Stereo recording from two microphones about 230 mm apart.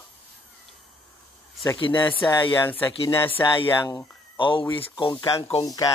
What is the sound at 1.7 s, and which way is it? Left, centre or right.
Speech, centre.